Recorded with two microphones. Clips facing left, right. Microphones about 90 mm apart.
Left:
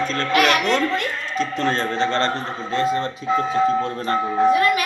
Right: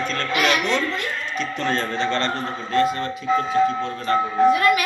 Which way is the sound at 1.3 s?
35° left (ahead or behind).